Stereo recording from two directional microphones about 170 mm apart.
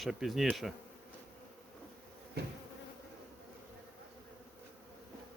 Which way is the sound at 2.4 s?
70° right (ahead or behind).